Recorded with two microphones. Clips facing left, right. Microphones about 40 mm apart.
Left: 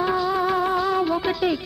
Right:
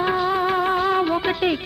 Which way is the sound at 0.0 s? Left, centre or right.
Right.